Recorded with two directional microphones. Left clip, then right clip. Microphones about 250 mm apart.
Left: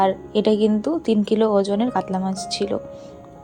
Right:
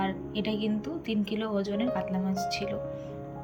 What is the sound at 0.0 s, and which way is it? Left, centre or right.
A woman's voice, centre.